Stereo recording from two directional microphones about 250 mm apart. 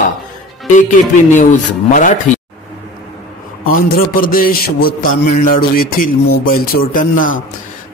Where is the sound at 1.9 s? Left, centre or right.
Left.